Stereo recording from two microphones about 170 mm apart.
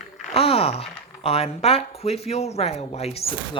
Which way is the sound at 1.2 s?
35° left (ahead or behind).